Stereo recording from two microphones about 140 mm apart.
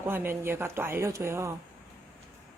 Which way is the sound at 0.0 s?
15° right (ahead or behind).